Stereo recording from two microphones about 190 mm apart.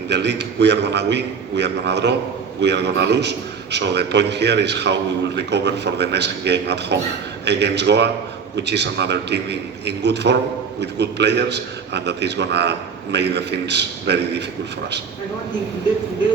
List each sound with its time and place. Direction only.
0.1 s a man's voice: 65° right (ahead or behind)